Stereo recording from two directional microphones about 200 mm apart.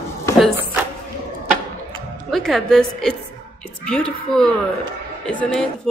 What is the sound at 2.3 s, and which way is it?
A woman's voice, centre (ahead or behind).